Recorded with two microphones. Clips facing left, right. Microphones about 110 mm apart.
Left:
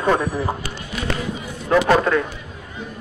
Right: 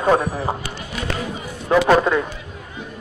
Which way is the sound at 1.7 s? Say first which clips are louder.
Right 1 dB; 20° right (ahead or behind).